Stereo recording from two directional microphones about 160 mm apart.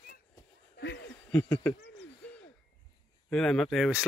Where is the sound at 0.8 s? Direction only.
90° left.